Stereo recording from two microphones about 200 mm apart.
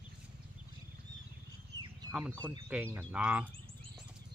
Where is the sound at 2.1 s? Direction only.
5° right (ahead or behind).